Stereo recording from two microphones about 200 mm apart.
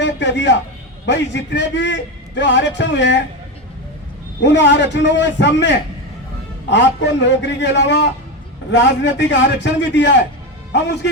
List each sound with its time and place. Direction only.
0.0 s a man's voice: 60° left (ahead or behind)
4.4 s a man's voice: 60° left (ahead or behind)